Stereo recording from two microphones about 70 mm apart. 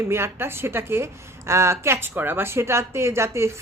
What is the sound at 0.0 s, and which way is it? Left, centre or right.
A woman's voice, right.